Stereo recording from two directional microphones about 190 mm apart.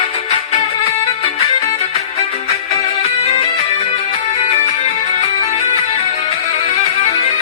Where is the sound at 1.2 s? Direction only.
35° left (ahead or behind).